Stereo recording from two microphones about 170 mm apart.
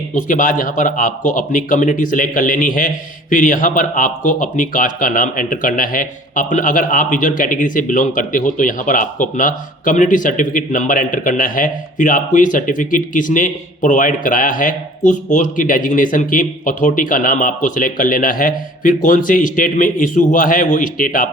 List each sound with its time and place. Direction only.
0.1 s speech: 50° left (ahead or behind)